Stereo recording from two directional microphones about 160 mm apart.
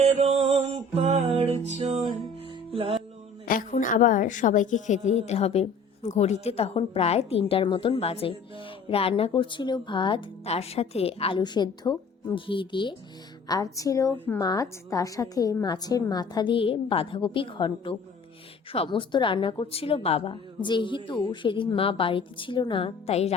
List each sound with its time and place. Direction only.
0.0 s music: 45° right (ahead or behind)
3.4 s a woman's voice: 60° left (ahead or behind); by 12.9 s 30° left (ahead or behind)
13.7 s a woman's voice: 20° left (ahead or behind); by 23.3 s 40° left (ahead or behind)